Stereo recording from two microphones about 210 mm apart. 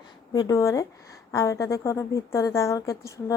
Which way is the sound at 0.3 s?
15° left (ahead or behind).